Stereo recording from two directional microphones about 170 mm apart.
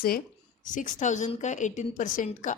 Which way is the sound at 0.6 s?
50° left (ahead or behind).